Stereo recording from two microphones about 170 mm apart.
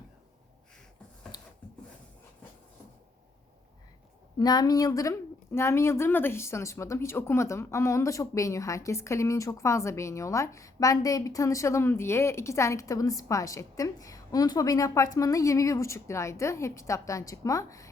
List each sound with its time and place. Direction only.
4.4 s a woman's voice: 20° left (ahead or behind)